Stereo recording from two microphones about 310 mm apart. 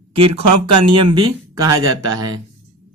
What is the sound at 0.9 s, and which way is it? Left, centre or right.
Speech, centre.